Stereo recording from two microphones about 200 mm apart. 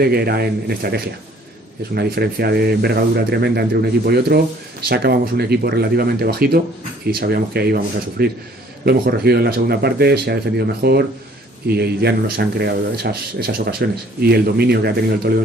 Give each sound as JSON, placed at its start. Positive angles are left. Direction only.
{"t": 0.0, "sound": "speech", "side_deg": -50}